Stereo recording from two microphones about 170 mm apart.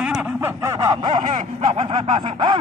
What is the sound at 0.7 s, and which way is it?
Snicker, 25° right (ahead or behind).